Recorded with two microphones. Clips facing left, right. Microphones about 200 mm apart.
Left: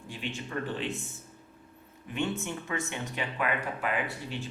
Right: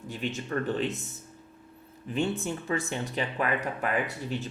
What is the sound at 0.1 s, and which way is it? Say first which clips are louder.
Speech: right 4 dB; 45° right (ahead or behind).